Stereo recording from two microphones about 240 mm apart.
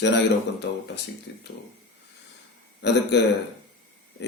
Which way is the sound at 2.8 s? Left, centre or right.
Left.